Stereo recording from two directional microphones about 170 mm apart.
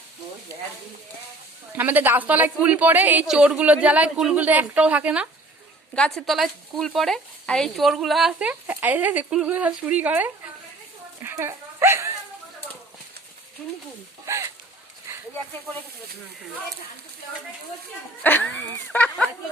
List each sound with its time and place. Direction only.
1.7 s a woman's voice: 10° right (ahead or behind)
5.9 s speech: 5° left (ahead or behind)
11.2 s dog: 15° right (ahead or behind)
14.3 s speech: 15° right (ahead or behind)
18.2 s speech: 10° left (ahead or behind)